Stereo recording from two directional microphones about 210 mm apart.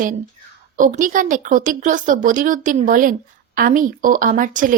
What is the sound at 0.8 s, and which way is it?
A woman's voice, 40° right (ahead or behind).